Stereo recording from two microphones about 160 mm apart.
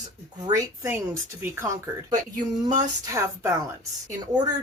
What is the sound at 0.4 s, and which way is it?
Speech, 20° right (ahead or behind).